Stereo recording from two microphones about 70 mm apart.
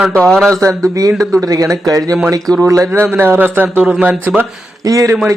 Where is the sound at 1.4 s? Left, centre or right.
Right.